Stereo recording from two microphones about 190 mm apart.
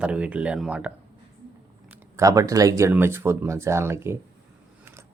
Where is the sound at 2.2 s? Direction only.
15° right (ahead or behind).